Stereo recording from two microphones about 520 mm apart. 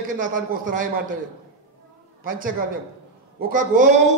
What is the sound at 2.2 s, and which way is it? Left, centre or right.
A man's voice, centre.